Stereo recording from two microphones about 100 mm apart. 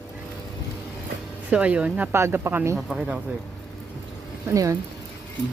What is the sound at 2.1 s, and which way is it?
Speech, 25° right (ahead or behind).